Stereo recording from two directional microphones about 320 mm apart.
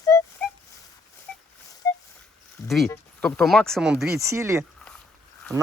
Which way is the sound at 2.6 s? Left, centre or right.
Centre.